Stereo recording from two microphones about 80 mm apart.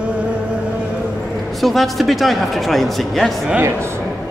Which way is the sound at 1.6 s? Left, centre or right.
Centre.